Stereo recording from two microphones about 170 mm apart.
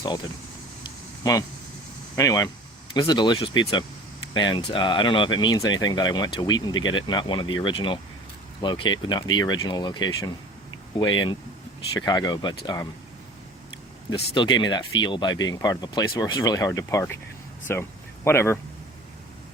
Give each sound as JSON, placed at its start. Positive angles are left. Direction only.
{"t": 1.2, "sound": "speech", "side_deg": 20}
{"t": 14.1, "sound": "speech", "side_deg": 25}